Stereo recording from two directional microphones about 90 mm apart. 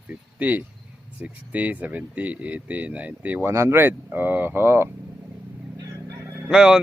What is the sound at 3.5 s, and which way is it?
Speech, 30° right (ahead or behind).